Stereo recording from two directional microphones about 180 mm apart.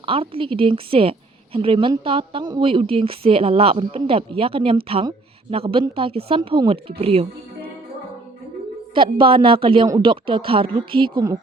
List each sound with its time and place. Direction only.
0.0 s a woman's voice: 30° right (ahead or behind)
9.0 s speech: 30° right (ahead or behind)